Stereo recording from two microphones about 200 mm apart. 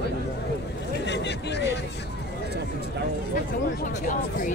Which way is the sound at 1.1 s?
60° left (ahead or behind).